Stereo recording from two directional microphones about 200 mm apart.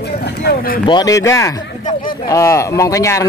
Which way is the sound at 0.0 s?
55° left (ahead or behind).